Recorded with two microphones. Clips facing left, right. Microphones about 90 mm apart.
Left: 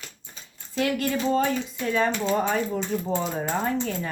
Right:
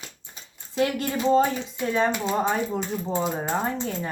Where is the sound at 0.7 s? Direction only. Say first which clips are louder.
Even; 25° right (ahead or behind).